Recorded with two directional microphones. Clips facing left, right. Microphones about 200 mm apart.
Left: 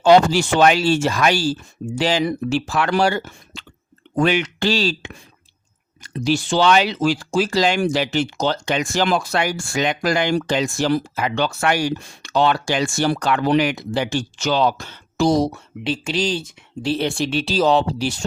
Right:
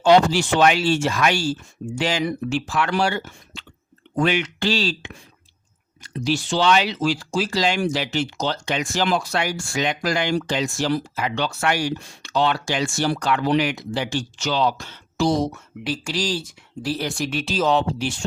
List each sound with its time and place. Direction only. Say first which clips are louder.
0.0 s speech: left 2 dB; 40° left (ahead or behind)